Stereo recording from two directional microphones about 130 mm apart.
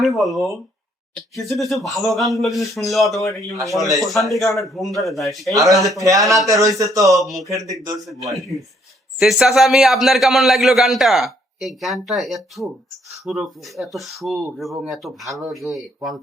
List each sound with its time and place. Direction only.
0.0 s a man's voice: centre (ahead or behind)
5.5 s speech: 25° right (ahead or behind)
7.1 s a man's voice: centre (ahead or behind)
7.5 s speech: 30° right (ahead or behind)
8.3 s a man's voice: centre (ahead or behind)